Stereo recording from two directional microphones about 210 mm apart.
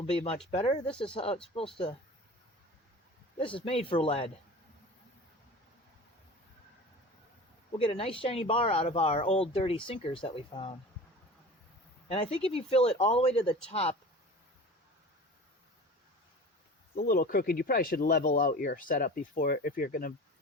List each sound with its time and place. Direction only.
0.5 s speech: 30° left (ahead or behind)
0.9 s speech: 5° left (ahead or behind)
1.1 s speech: 25° left (ahead or behind)
3.3 s speech: 25° left (ahead or behind)
7.8 s speech: 25° left (ahead or behind)
12.0 s speech: 30° left (ahead or behind)
16.9 s speech: 45° left (ahead or behind)